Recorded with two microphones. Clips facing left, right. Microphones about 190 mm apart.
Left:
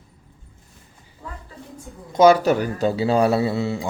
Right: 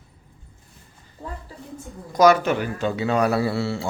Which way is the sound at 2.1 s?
25° left (ahead or behind).